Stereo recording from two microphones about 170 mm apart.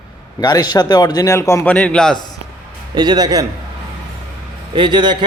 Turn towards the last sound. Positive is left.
turn(degrees=-25)  # may be behind; listen again after turning